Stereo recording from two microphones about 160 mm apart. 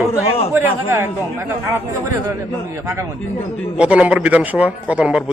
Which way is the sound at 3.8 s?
5° right (ahead or behind).